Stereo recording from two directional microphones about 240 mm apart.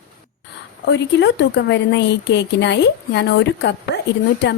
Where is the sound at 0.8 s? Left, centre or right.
Left.